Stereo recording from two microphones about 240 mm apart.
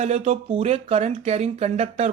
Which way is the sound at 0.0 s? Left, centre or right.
Right.